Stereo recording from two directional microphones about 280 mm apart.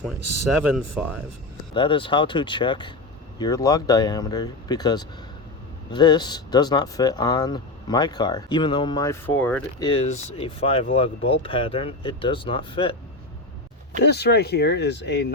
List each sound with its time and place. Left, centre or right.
0.2 s speech: right
1.7 s speech: centre
9.9 s speech: left
14.0 s speech: left